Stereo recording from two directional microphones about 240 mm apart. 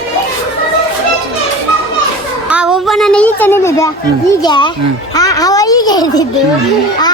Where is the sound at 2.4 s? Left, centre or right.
Centre.